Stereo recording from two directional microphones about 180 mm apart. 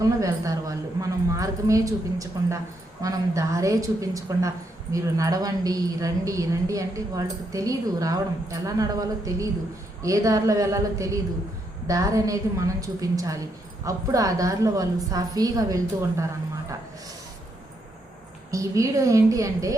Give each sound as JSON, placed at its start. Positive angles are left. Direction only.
{"t": 0.0, "sound": "a woman's voice", "side_deg": -20}
{"t": 18.5, "sound": "a woman's voice", "side_deg": -20}